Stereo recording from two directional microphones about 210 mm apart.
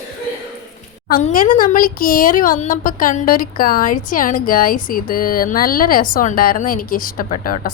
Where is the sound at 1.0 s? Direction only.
40° left (ahead or behind).